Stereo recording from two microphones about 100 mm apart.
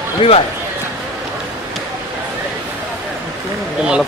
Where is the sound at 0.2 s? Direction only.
65° left (ahead or behind).